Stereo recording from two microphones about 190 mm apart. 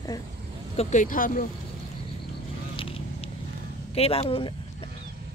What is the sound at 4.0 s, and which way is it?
Speech, 30° left (ahead or behind).